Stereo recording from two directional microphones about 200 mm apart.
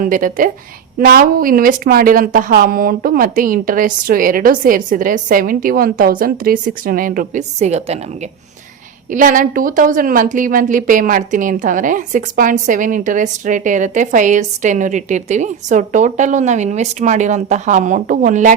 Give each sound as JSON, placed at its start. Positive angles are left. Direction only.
{"t": 0.0, "sound": "speech", "side_deg": -40}
{"t": 9.0, "sound": "a woman's voice", "side_deg": -40}